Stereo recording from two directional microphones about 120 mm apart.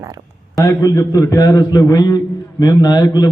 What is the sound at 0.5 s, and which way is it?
A man's voice, 25° left (ahead or behind).